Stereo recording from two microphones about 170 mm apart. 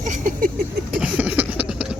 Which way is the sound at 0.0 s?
45° right (ahead or behind).